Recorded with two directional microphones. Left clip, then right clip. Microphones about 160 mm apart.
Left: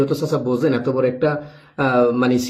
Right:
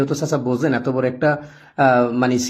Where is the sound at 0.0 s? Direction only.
20° right (ahead or behind).